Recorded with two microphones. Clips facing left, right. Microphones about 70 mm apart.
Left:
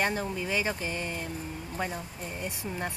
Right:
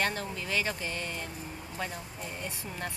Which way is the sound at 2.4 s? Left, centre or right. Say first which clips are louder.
Left 5 dB; centre.